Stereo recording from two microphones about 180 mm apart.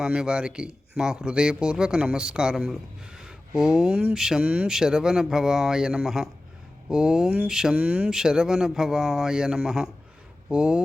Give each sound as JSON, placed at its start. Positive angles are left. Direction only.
{"t": 0.0, "sound": "speech", "side_deg": -5}